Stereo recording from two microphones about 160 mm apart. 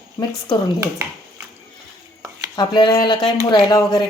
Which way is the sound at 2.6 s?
25° left (ahead or behind).